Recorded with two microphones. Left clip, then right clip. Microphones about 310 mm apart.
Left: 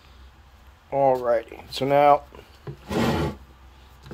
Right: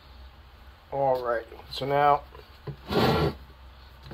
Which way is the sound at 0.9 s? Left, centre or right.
Left.